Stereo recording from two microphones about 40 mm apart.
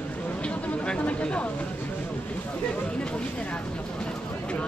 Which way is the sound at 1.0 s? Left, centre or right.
Left.